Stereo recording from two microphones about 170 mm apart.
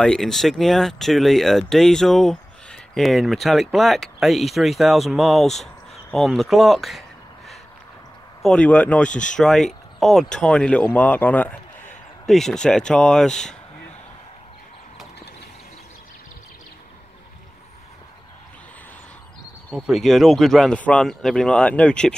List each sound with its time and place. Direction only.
0.0 s speech: 5° left (ahead or behind)
9.1 s speech: 45° left (ahead or behind)
9.4 s speech: 5° left (ahead or behind)
19.7 s speech: centre (ahead or behind)